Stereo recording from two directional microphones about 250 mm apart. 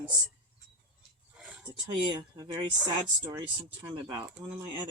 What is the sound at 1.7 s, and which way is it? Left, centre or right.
Speech, centre.